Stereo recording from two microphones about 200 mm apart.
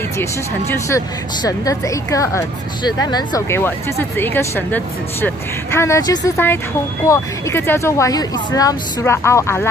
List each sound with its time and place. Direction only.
0.2 s a woman's voice: 15° left (ahead or behind)